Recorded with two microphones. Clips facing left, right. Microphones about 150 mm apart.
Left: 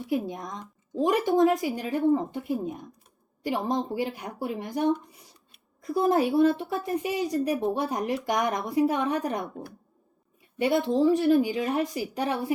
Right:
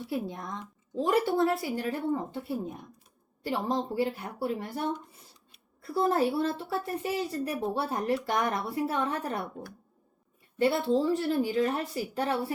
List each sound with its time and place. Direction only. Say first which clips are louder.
0.1 s a woman's voice: left 5 dB; 15° left (ahead or behind)
10.6 s a woman's voice: left 3 dB; 15° left (ahead or behind)